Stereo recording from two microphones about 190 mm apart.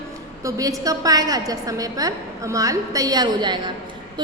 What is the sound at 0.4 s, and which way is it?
A woman's voice, 15° right (ahead or behind).